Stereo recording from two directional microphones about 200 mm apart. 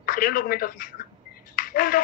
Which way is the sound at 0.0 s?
45° left (ahead or behind).